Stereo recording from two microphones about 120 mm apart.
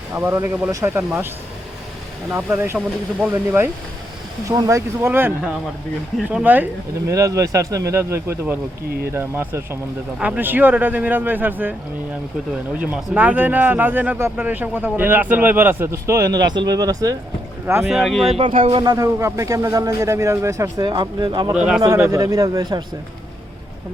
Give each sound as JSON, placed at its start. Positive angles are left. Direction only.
{"t": 0.1, "sound": "speech", "side_deg": -25}
{"t": 2.3, "sound": "speech", "side_deg": -20}
{"t": 4.4, "sound": "speech", "side_deg": -30}
{"t": 7.1, "sound": "speech", "side_deg": -25}
{"t": 12.8, "sound": "speech", "side_deg": -15}
{"t": 17.8, "sound": "speech", "side_deg": 0}
{"t": 18.7, "sound": "speech", "side_deg": -35}
{"t": 20.8, "sound": "speech", "side_deg": -40}
{"t": 21.5, "sound": "speech", "side_deg": -10}
{"t": 22.1, "sound": "speech", "side_deg": -30}